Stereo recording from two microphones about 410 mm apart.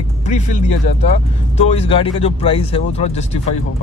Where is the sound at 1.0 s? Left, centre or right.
Centre.